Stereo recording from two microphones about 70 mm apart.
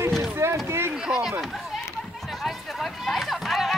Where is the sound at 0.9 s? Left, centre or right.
Centre.